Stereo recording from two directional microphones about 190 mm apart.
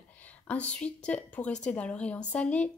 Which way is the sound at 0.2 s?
5° left (ahead or behind).